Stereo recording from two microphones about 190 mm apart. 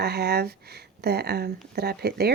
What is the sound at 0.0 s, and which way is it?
Speech, 60° right (ahead or behind).